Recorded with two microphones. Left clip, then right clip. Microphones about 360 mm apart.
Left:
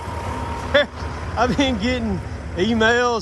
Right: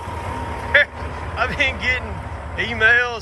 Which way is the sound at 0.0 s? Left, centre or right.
Centre.